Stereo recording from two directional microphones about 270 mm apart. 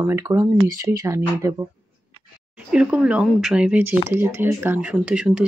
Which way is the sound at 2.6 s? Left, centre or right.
Centre.